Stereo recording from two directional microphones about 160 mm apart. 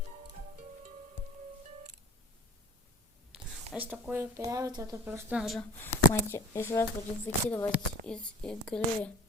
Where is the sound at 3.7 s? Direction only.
10° right (ahead or behind).